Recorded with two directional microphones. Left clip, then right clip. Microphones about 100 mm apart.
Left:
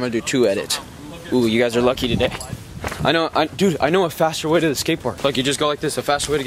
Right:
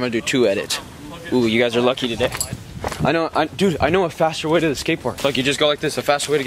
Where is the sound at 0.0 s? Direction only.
Centre (ahead or behind); by 3.4 s 15° left (ahead or behind).